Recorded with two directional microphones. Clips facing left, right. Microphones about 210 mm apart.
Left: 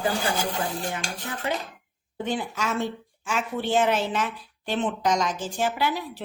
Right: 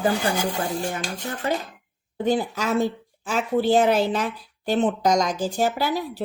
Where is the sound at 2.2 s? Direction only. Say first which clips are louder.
Right 6 dB; 40° right (ahead or behind).